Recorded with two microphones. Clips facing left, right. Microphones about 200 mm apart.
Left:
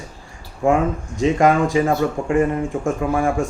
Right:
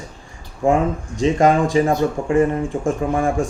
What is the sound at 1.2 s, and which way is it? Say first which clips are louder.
Speech: even; 25° right (ahead or behind).